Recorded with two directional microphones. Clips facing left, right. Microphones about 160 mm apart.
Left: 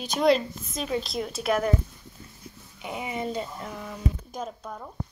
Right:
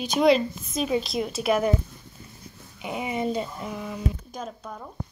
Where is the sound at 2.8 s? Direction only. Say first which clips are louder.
Right 3 dB; 20° right (ahead or behind).